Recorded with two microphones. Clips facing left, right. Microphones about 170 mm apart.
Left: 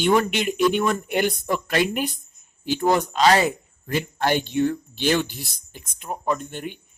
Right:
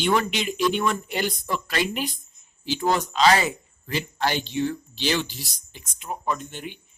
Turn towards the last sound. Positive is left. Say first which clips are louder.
# left 4 dB
turn(degrees=50)  # may be behind; listen again after turning